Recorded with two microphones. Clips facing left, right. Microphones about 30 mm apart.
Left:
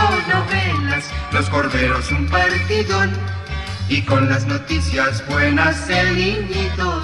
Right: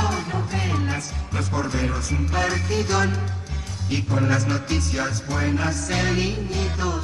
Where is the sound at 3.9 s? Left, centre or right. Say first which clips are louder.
Left 7 dB; left.